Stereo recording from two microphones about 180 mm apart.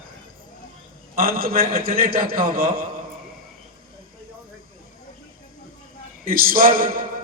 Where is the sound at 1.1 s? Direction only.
55° right (ahead or behind).